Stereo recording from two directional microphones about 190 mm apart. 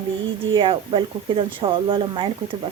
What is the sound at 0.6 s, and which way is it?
Speech, 25° right (ahead or behind).